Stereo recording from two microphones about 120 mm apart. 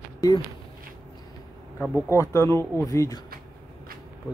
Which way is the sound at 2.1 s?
25° left (ahead or behind).